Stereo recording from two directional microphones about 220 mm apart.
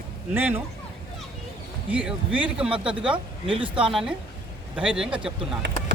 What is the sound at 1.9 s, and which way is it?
Speech, 5° right (ahead or behind).